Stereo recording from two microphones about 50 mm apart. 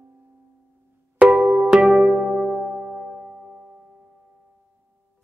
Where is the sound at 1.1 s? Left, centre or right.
Centre.